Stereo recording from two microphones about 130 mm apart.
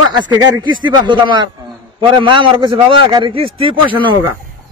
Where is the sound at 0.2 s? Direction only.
35° right (ahead or behind).